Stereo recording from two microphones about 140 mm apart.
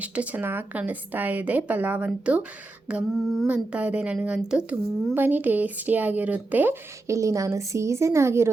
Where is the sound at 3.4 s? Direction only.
10° right (ahead or behind).